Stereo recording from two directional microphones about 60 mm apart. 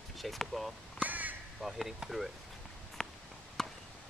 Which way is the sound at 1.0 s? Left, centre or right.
Right.